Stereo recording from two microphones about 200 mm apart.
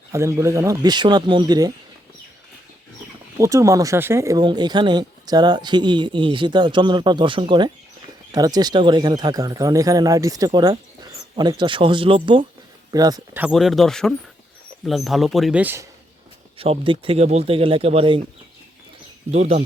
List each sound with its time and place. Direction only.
0.1 s speech: 15° right (ahead or behind)
3.3 s speech: 15° right (ahead or behind)
13.4 s speech: centre (ahead or behind)
16.6 s speech: 25° right (ahead or behind)
19.3 s speech: 35° right (ahead or behind)